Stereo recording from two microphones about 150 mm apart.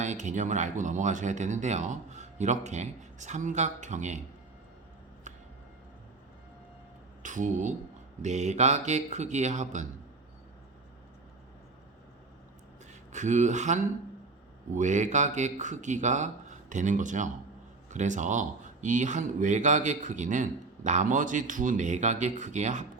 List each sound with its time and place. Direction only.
0.0 s speech: 55° right (ahead or behind)
5.3 s a sound: 55° right (ahead or behind)
7.2 s speech: 55° right (ahead or behind)
13.1 s speech: 50° right (ahead or behind)